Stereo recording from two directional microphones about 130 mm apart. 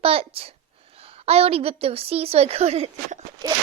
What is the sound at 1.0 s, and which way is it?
A woman's voice, 50° right (ahead or behind).